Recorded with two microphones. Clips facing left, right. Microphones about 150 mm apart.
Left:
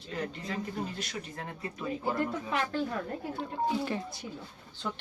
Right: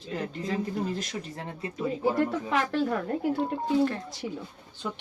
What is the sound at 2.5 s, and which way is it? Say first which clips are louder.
Speech: right 5 dB; 90° right.